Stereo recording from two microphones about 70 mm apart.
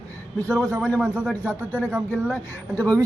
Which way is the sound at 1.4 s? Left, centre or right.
Left.